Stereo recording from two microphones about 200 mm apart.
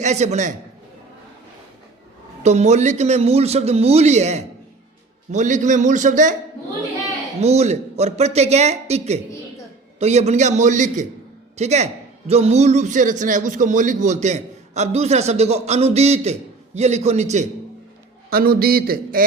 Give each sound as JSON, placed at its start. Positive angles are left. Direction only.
{"t": 0.0, "sound": "a man's voice", "side_deg": -35}
{"t": 2.4, "sound": "a man's voice", "side_deg": -35}
{"t": 7.3, "sound": "a man's voice", "side_deg": -30}
{"t": 18.3, "sound": "a man's voice", "side_deg": -50}